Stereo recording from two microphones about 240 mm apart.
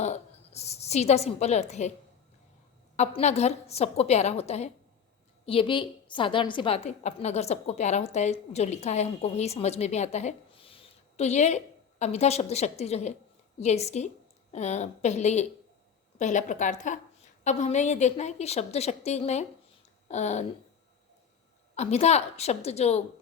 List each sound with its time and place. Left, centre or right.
0.0 s a woman's voice: left
2.9 s a woman's voice: left
21.8 s a woman's voice: left